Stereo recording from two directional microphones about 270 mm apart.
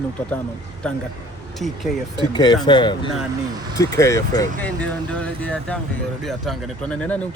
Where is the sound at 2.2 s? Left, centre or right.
Centre.